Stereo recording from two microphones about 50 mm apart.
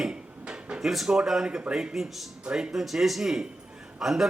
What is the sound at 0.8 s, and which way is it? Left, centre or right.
A man's voice, centre.